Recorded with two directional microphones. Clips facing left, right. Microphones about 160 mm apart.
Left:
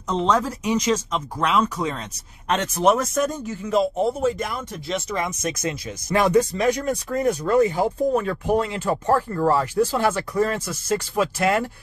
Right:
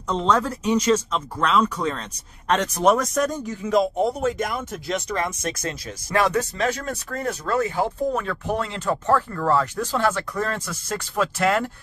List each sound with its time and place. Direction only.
0.1 s speech: 5° left (ahead or behind)
5.1 s speech: 10° left (ahead or behind)
9.0 s speech: 35° left (ahead or behind)
9.4 s speech: 15° left (ahead or behind)